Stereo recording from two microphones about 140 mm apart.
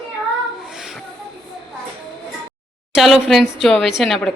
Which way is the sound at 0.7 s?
Centre (ahead or behind).